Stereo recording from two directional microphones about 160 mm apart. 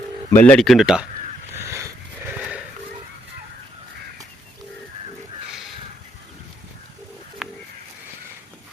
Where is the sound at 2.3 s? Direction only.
5° right (ahead or behind).